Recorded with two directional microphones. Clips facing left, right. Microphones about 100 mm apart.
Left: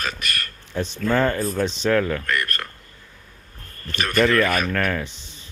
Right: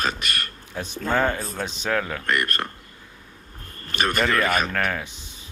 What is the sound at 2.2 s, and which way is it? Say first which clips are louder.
Speech: right 1 dB; 30° right (ahead or behind).